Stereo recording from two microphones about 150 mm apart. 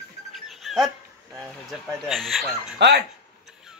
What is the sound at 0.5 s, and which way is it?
Dog, centre (ahead or behind).